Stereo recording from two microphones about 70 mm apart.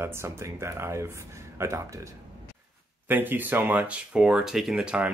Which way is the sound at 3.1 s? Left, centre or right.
Right.